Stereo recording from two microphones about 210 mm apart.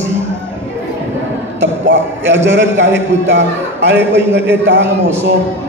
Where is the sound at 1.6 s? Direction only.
60° right (ahead or behind).